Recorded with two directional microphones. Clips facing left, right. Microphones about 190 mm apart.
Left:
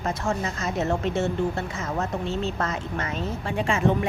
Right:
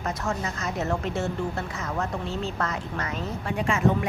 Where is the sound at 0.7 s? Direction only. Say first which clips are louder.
Left 4 dB; 25° left (ahead or behind).